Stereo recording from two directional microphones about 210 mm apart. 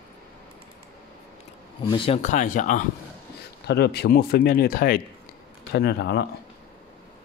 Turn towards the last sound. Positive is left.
turn(degrees=55)  # may be behind; listen again after turning